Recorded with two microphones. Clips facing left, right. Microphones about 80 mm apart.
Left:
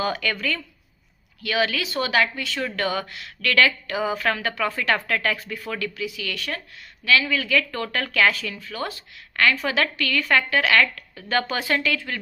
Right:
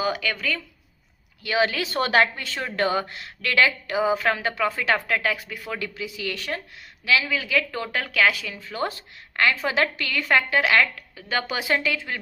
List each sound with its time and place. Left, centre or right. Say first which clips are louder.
0.0 s speech: even; centre
1.4 s a woman's voice: right 1 dB; right
7.0 s speech: left 2 dB; centre
8.5 s a woman's voice: right 2 dB; right